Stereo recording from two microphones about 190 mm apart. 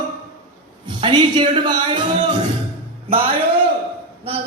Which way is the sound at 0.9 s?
25° right (ahead or behind).